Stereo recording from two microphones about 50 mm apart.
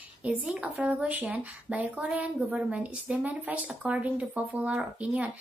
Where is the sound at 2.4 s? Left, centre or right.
Centre.